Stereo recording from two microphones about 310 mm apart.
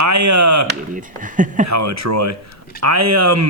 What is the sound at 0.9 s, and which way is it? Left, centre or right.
Speech, right.